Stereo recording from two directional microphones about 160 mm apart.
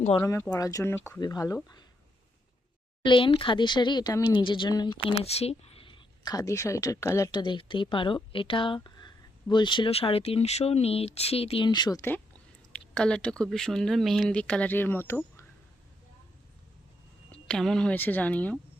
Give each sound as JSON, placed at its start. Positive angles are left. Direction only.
{"t": 0.2, "sound": "speech", "side_deg": 15}
{"t": 3.0, "sound": "speech", "side_deg": 30}
{"t": 12.7, "sound": "speech", "side_deg": 5}
{"t": 17.5, "sound": "speech", "side_deg": 5}